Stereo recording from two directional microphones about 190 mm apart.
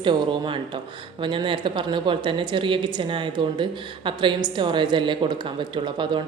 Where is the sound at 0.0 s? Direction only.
25° right (ahead or behind).